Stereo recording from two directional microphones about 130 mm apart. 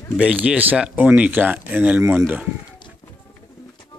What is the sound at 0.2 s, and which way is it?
Speech, 10° right (ahead or behind).